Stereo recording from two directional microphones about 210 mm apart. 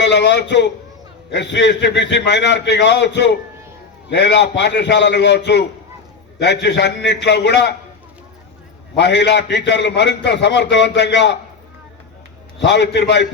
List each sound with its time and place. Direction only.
0.0 s a man's voice: 55° left (ahead or behind)
9.0 s a man's voice: 55° left (ahead or behind)
12.5 s a man's voice: 55° left (ahead or behind)